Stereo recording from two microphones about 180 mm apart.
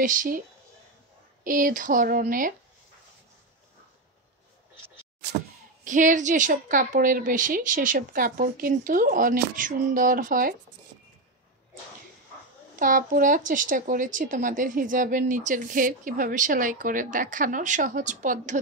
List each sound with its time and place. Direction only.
0.0 s speech: 50° right (ahead or behind)
1.4 s speech: 50° right (ahead or behind)
5.9 s speech: 45° right (ahead or behind)
12.7 s speech: 50° right (ahead or behind)